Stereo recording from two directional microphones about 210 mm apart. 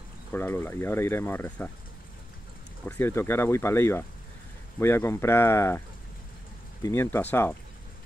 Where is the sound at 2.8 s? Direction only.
10° left (ahead or behind).